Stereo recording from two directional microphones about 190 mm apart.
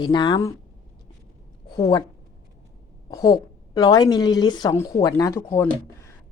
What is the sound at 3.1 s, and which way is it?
A woman's voice, 20° left (ahead or behind).